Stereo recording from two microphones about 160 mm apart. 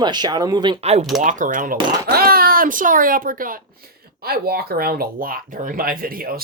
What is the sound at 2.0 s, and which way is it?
Speech, 70° right (ahead or behind).